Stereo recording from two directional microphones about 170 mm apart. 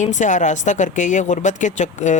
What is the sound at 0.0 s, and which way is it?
Speech, 45° left (ahead or behind).